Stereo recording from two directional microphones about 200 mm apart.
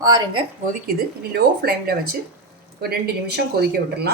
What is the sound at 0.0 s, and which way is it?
Speech, 20° right (ahead or behind).